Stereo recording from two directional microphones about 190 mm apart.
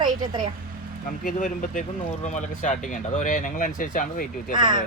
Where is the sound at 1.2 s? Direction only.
45° left (ahead or behind).